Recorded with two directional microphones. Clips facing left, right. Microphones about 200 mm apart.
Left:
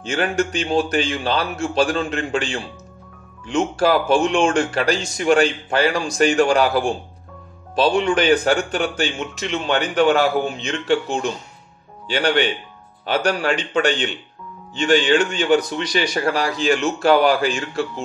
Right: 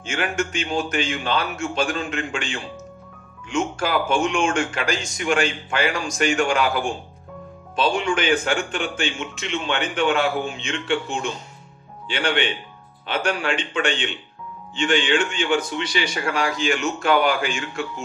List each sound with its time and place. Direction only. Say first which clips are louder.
0.0 s speech: left 4 dB; 35° left (ahead or behind)